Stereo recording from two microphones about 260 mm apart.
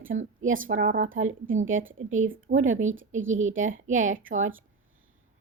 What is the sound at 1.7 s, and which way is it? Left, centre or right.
Speech, right.